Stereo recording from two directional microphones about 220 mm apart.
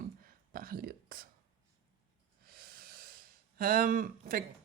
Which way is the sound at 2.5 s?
45° right (ahead or behind).